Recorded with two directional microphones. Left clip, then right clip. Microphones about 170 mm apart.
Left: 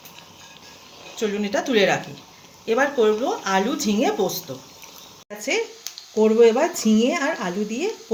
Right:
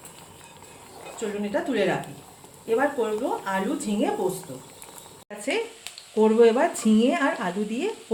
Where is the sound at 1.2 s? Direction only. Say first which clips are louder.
Left 4 dB; 65° left (ahead or behind).